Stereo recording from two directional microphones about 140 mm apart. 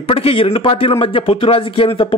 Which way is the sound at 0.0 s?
45° left (ahead or behind).